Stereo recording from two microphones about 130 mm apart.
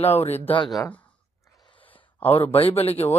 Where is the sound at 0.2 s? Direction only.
50° left (ahead or behind).